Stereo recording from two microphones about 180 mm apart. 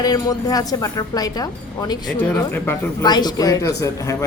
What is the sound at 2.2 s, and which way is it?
Speech, 10° left (ahead or behind).